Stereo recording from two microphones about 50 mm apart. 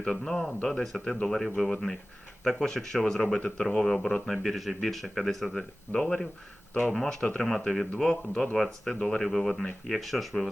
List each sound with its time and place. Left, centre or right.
0.0 s speech: centre
3.8 s speech: centre